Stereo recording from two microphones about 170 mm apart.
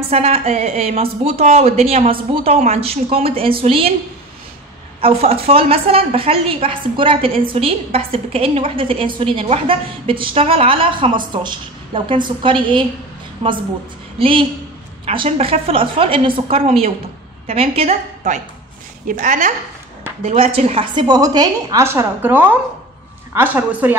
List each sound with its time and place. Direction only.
0.1 s a woman's voice: 35° right (ahead or behind)
5.0 s a woman's voice: 35° right (ahead or behind)
20.2 s a woman's voice: 35° right (ahead or behind); by 24.0 s 10° right (ahead or behind)